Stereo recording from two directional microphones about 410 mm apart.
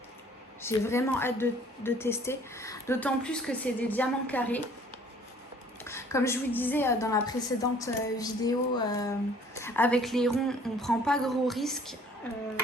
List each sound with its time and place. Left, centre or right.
0.6 s a woman's voice: centre
5.8 s a woman's voice: centre